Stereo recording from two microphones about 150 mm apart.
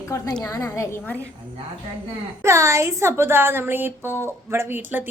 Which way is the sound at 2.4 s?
20° right (ahead or behind).